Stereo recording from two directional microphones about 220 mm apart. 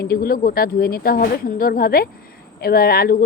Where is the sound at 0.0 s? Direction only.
45° left (ahead or behind).